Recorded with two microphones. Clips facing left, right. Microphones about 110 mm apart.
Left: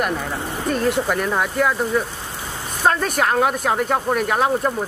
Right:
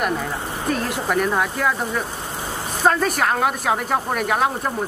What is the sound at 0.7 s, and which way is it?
Speech, centre (ahead or behind).